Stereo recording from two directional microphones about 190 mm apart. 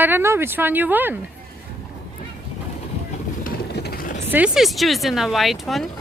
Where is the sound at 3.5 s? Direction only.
55° left (ahead or behind).